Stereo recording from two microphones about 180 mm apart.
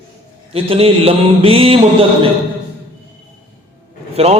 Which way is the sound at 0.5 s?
30° right (ahead or behind).